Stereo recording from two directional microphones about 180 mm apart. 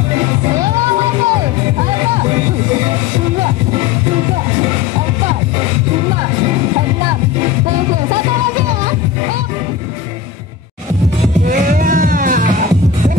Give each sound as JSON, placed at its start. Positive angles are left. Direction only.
{"t": 11.4, "sound": "music", "side_deg": -45}